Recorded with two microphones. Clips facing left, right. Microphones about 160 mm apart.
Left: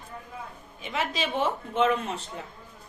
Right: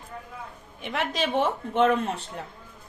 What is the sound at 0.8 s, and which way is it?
A woman's voice, 60° right (ahead or behind).